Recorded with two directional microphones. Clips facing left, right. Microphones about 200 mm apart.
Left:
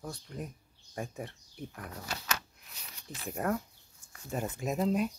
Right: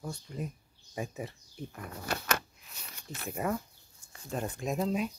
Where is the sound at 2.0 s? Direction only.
55° right (ahead or behind).